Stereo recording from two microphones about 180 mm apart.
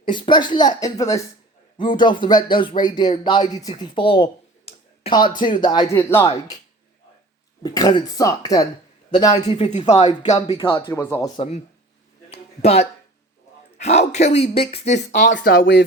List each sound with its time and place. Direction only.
0.0 s speech: 25° left (ahead or behind)
5.9 s speech: 15° left (ahead or behind)
7.6 s speech: 20° left (ahead or behind)
9.6 s speech: 40° left (ahead or behind); by 11.3 s 15° left (ahead or behind)
12.3 s speech: 35° left (ahead or behind)
15.3 s speech: 70° left (ahead or behind)